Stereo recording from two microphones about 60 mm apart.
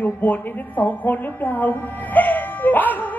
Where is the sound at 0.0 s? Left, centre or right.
Left.